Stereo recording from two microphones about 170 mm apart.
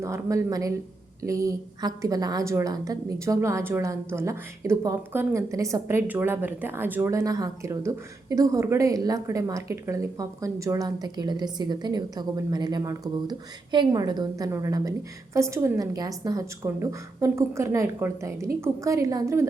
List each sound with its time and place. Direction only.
0.0 s a woman's voice: 15° right (ahead or behind)